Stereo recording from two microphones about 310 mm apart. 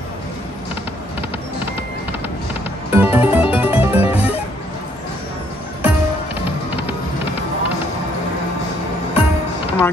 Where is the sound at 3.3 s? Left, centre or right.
Centre.